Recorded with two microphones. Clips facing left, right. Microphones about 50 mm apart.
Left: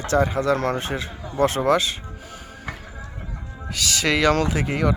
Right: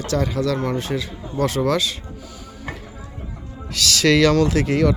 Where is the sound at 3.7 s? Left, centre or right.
Centre.